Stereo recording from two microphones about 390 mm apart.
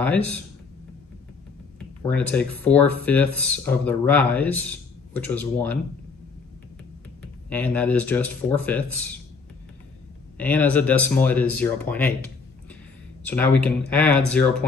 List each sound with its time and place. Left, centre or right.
0.0 s speech: centre
2.0 s speech: centre
7.4 s speech: centre
10.3 s speech: centre
13.3 s speech: centre